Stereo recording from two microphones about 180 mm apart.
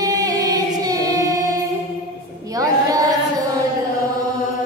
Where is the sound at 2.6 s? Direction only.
20° right (ahead or behind).